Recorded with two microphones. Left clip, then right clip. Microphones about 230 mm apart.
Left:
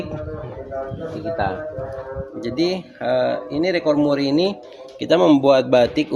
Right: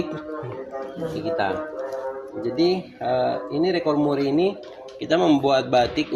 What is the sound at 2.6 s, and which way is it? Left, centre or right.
Speech, left.